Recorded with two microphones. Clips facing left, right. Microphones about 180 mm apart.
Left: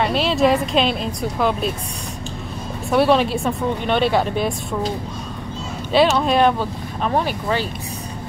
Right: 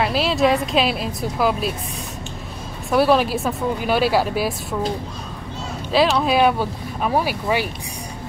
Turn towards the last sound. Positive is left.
turn(degrees=-10)  # may be behind; listen again after turning